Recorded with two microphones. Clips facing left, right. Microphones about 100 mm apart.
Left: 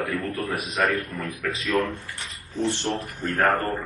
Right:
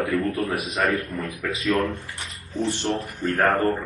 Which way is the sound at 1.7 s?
Centre (ahead or behind).